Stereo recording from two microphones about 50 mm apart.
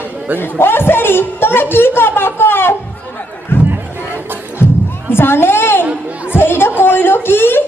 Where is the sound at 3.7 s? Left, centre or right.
Right.